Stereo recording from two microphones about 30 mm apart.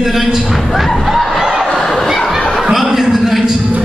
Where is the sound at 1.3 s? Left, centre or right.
Centre.